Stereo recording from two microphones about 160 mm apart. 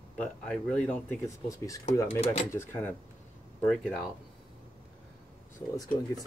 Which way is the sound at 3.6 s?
5° left (ahead or behind).